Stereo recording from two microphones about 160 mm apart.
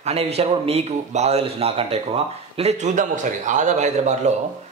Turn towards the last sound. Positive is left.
turn(degrees=-45)  # may be behind; listen again after turning